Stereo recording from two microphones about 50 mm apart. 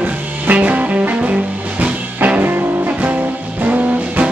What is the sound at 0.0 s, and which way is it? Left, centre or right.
Music, right.